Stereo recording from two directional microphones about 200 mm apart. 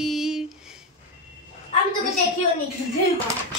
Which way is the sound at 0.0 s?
Centre (ahead or behind).